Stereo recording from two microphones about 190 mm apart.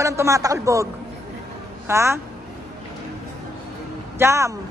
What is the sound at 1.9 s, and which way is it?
Speech, 15° right (ahead or behind).